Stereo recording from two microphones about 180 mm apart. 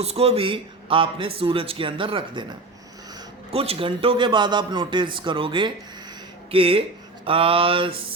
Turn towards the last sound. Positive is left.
turn(degrees=-30)  # may be behind; listen again after turning